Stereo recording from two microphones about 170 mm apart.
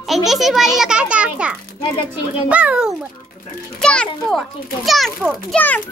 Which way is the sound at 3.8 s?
5° left (ahead or behind).